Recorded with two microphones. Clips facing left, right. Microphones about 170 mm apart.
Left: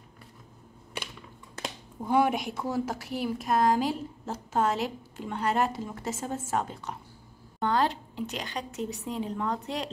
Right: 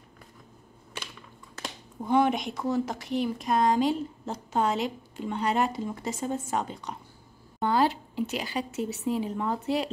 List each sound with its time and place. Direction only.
2.0 s a woman's voice: 10° left (ahead or behind)